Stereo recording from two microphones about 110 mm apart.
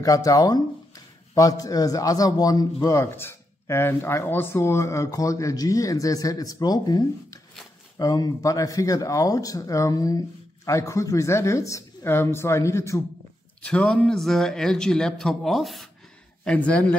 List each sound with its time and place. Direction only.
0.0 s speech: 30° left (ahead or behind)
13.7 s a man's voice: 10° left (ahead or behind)
16.4 s speech: 10° left (ahead or behind)